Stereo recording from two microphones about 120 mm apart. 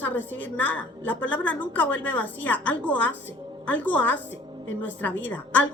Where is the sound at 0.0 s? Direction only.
15° left (ahead or behind).